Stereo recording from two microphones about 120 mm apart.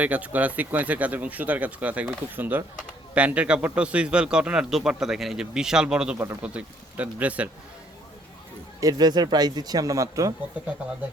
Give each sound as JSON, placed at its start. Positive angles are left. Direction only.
{"t": 0.0, "sound": "speech", "side_deg": -15}
{"t": 8.8, "sound": "speech", "side_deg": -35}